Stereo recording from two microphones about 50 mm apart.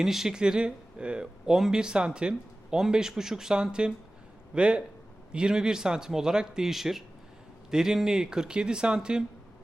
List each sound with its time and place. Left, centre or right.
0.0 s speech: centre